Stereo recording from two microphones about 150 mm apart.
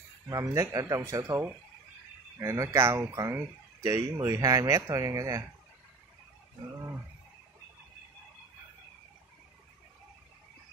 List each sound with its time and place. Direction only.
0.3 s speech: 20° right (ahead or behind)